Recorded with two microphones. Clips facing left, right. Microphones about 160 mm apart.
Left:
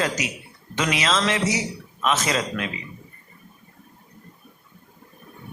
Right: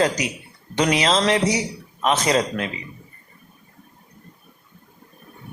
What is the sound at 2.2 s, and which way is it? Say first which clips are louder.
Speech: right 5 dB; 30° right (ahead or behind).